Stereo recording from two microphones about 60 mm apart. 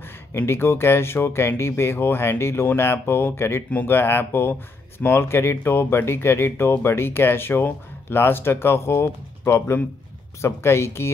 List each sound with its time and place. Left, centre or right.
0.5 s speech: left